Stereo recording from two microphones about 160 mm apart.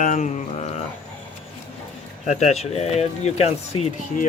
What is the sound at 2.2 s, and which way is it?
Speech, 45° left (ahead or behind).